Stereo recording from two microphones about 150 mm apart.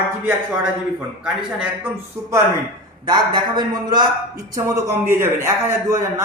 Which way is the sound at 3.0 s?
30° right (ahead or behind).